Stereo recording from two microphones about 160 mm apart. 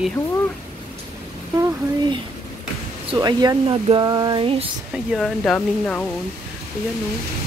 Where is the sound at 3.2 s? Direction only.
25° right (ahead or behind).